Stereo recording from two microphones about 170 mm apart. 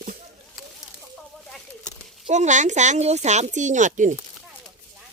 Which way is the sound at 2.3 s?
45° right (ahead or behind).